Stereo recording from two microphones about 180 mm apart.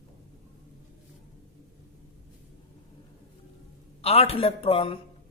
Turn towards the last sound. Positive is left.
turn(degrees=30)  # may be behind; listen again after turning